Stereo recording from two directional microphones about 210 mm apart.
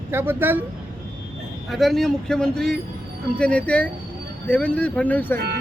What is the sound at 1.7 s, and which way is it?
Speech, centre (ahead or behind).